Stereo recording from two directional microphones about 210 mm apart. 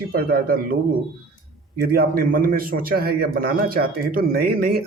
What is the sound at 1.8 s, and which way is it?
A man's voice, 45° right (ahead or behind).